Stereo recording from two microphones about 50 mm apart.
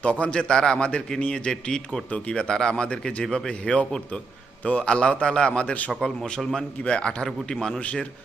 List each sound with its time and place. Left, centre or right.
0.0 s a man's voice: left
2.0 s a man's voice: left
6.0 s speech: centre
6.8 s a man's voice: left